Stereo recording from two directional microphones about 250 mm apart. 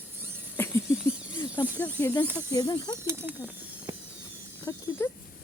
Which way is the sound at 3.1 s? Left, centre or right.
Centre.